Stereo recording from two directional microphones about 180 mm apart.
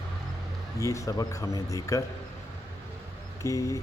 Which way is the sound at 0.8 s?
15° left (ahead or behind).